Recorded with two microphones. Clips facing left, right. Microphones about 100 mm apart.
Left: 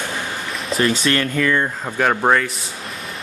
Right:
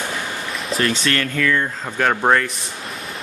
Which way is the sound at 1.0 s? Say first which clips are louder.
Left 2 dB; 20° left (ahead or behind).